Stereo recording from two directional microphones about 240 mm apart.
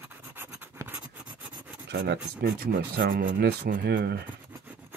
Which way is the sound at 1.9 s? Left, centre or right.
Right.